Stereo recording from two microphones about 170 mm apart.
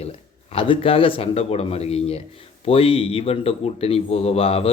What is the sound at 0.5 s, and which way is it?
Speech, 30° left (ahead or behind).